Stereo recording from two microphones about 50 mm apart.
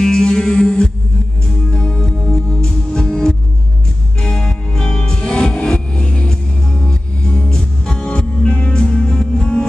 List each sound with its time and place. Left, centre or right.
0.0 s music: centre